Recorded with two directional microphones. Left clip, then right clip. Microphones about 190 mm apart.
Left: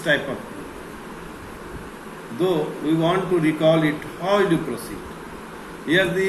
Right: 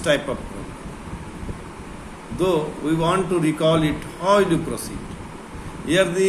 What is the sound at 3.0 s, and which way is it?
A man's voice, 50° right (ahead or behind).